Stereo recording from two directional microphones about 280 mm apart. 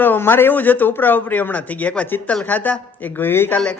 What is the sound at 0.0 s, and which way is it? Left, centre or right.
Speech, centre.